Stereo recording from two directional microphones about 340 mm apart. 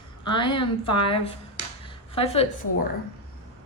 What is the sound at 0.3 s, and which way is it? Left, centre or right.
A woman's voice, centre.